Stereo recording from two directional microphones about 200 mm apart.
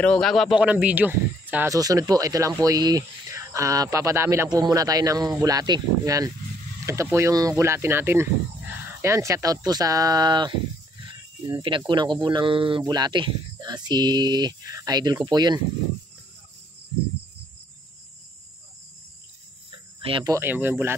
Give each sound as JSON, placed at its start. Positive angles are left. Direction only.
{"t": 0.0, "sound": "speech", "side_deg": 5}
{"t": 11.9, "sound": "speech", "side_deg": -25}
{"t": 20.0, "sound": "speech", "side_deg": -25}
{"t": 20.3, "sound": "speech", "side_deg": -10}